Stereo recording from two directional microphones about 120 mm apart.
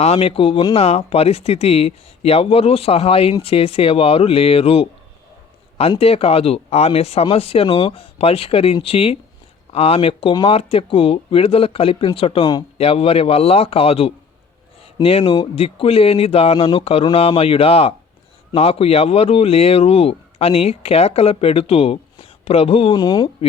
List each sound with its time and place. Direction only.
0.0 s speech: 55° left (ahead or behind)
6.0 s speech: 55° left (ahead or behind)
12.7 s speech: 55° left (ahead or behind)
23.0 s speech: 35° left (ahead or behind)